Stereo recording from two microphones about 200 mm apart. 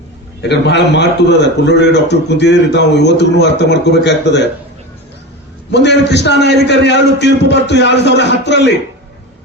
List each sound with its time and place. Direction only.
0.4 s a man's voice: 60° left (ahead or behind)
5.7 s a man's voice: 60° left (ahead or behind)